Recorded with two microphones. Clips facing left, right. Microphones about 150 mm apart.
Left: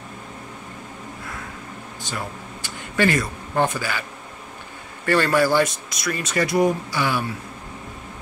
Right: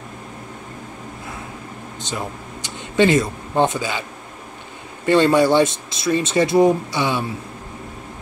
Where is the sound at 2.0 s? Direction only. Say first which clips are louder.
Right 3 dB; 20° right (ahead or behind).